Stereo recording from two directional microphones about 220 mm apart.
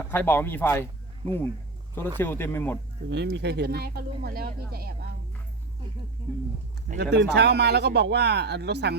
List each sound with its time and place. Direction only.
0.0 s speech: 10° left (ahead or behind)
3.1 s speech: 50° right (ahead or behind)
7.0 s speech: 50° right (ahead or behind)